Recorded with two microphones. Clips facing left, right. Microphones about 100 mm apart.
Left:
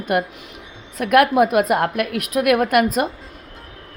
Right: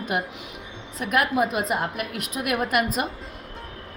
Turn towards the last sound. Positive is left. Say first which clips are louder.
# left 7 dB
turn(degrees=50)  # may be behind; listen again after turning